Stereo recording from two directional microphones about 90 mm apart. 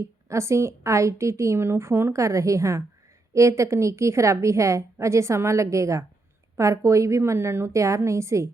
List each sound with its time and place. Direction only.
0.0 s a woman's voice: 35° right (ahead or behind)